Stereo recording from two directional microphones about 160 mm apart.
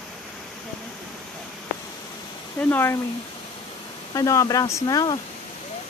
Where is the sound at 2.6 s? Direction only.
10° left (ahead or behind).